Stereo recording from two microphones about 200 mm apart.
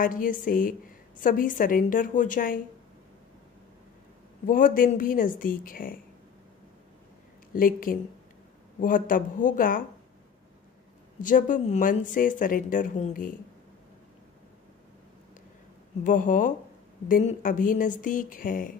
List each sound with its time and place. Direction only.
0.0 s speech: 45° left (ahead or behind)
4.5 s speech: 40° left (ahead or behind)
7.5 s speech: 45° left (ahead or behind)
11.1 s speech: 40° left (ahead or behind)
16.0 s speech: 40° left (ahead or behind)